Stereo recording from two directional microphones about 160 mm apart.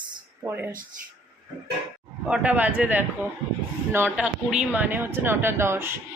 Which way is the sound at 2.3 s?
10° right (ahead or behind).